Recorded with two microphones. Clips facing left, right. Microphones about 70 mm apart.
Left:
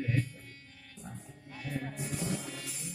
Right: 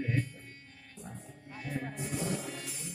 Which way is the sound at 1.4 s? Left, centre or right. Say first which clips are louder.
Even; right.